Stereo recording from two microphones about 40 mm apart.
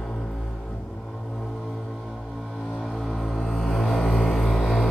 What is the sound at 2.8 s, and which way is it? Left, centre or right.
Music, centre.